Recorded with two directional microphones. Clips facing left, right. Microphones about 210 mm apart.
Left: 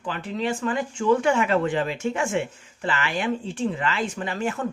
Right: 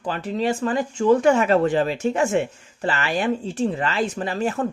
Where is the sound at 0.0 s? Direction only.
40° right (ahead or behind).